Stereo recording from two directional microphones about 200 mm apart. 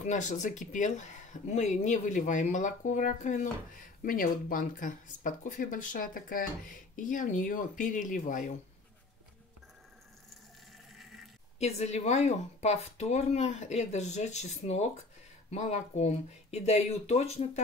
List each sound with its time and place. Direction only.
0.0 s speech: 35° left (ahead or behind)
11.6 s speech: 35° left (ahead or behind)